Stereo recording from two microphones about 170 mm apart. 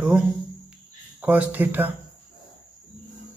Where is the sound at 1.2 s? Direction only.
10° right (ahead or behind).